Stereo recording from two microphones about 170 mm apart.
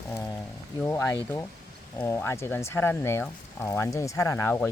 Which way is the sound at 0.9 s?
15° left (ahead or behind).